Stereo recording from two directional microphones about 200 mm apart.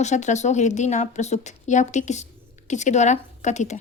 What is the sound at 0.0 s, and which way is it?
A woman's voice, 35° left (ahead or behind).